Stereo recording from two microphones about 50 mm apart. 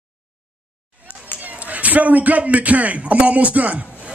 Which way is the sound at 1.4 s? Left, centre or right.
Right.